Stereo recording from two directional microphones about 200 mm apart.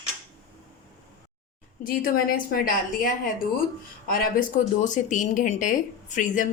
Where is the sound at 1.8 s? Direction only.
45° left (ahead or behind).